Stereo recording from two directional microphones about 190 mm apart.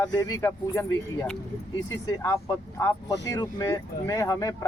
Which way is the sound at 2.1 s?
15° left (ahead or behind).